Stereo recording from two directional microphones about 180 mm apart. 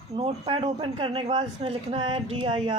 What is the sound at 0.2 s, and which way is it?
A man's voice, 30° right (ahead or behind).